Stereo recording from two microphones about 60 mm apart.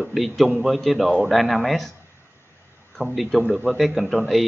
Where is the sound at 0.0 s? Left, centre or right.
Centre.